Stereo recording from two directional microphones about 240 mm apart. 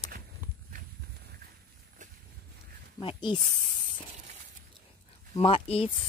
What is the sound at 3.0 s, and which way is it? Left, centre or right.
Speech, left.